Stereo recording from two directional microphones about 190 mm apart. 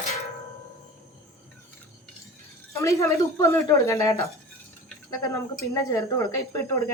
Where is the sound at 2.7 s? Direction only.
15° left (ahead or behind).